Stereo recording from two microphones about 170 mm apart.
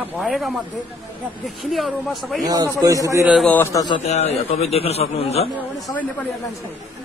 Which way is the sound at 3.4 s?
15° left (ahead or behind).